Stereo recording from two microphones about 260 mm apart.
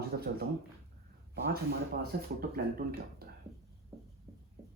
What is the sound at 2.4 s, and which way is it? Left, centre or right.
Speech, right.